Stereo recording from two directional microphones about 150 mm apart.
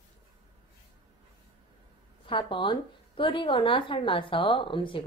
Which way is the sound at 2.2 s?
35° left (ahead or behind).